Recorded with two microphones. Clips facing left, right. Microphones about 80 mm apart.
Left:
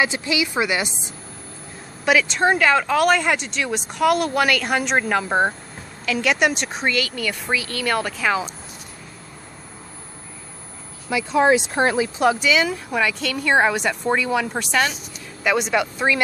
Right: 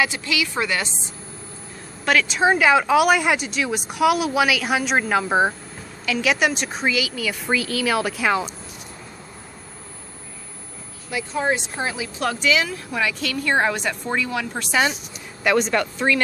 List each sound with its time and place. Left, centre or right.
0.0 s a woman's voice: left
2.0 s speech: centre
11.1 s speech: left
12.2 s speech: centre
14.7 s a woman's voice: centre
15.4 s speech: centre